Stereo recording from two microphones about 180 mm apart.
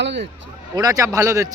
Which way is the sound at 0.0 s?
75° right (ahead or behind).